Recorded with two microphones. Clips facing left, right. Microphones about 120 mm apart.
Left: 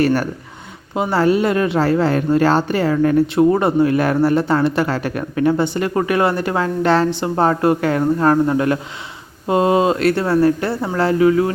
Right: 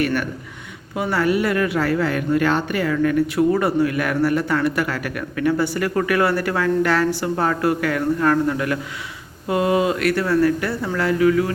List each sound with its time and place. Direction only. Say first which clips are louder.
0.0 s speech: left 5 dB; 35° left (ahead or behind)